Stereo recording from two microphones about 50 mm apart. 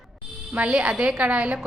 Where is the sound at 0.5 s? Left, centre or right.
Right.